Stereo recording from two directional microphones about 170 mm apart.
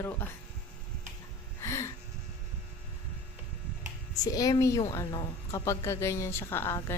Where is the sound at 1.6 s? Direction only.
15° left (ahead or behind).